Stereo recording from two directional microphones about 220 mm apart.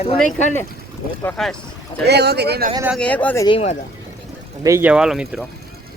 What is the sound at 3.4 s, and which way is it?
Speech, 25° left (ahead or behind).